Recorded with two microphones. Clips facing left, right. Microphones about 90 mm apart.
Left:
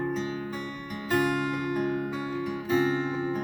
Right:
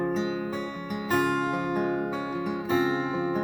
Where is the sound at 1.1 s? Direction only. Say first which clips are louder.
Right 1 dB; 25° right (ahead or behind).